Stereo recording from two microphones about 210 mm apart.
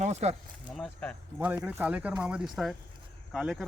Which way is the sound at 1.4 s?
5° right (ahead or behind).